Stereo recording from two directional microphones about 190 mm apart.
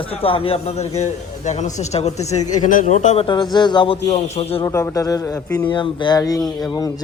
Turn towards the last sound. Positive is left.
turn(degrees=20)  # may be behind; listen again after turning